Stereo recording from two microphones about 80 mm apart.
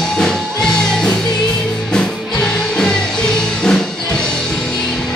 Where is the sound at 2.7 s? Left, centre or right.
Centre.